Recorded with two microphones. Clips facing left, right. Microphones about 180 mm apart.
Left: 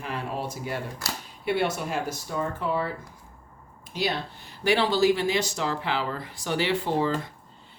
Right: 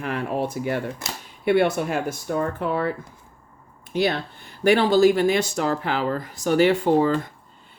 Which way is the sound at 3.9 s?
55° right (ahead or behind).